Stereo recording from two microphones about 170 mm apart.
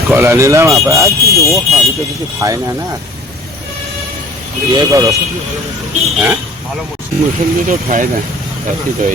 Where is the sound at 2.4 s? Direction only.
15° right (ahead or behind).